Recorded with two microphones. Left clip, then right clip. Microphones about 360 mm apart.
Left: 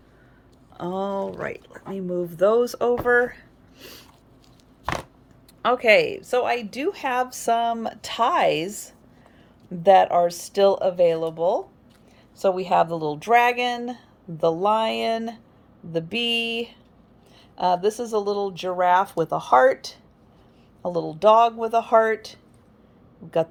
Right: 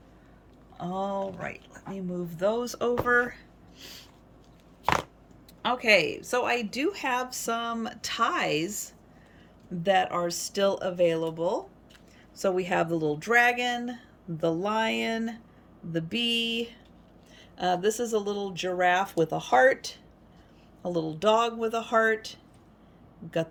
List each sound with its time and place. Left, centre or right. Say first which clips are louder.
0.8 s a woman's voice: left 4 dB; centre
5.6 s a woman's voice: left 5 dB; centre
12.8 s speech: left 4 dB; centre